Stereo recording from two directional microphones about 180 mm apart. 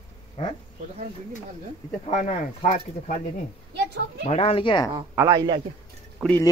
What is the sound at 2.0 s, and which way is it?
Speech, 40° left (ahead or behind).